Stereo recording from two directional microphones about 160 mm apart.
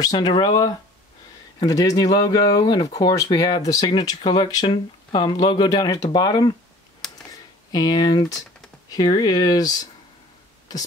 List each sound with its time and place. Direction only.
0.0 s speech: 25° left (ahead or behind)
7.7 s speech: 25° left (ahead or behind)